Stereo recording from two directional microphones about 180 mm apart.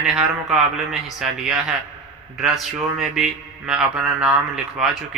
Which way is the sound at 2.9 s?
Centre (ahead or behind).